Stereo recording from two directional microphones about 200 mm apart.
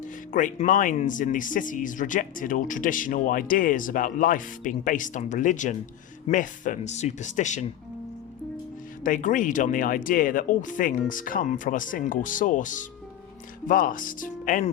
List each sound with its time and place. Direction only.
0.0 s speech: 40° left (ahead or behind)
9.0 s speech: 40° left (ahead or behind)